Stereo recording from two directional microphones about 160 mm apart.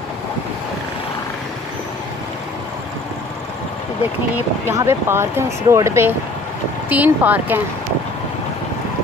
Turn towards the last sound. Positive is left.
turn(degrees=-10)  # may be behind; listen again after turning